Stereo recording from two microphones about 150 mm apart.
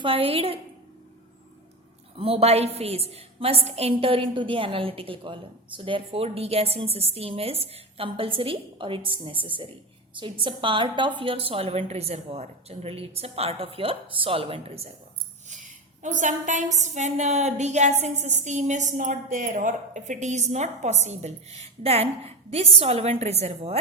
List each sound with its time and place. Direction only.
0.0 s a woman's voice: 40° right (ahead or behind)
2.1 s a woman's voice: 40° right (ahead or behind)
15.4 s a sound: 55° right (ahead or behind)
16.7 s a woman's voice: 50° right (ahead or behind)